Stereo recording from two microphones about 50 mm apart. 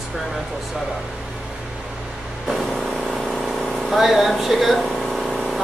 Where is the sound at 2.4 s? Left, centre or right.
Centre.